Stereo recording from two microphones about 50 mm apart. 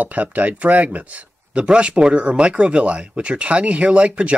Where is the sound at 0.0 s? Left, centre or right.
Right.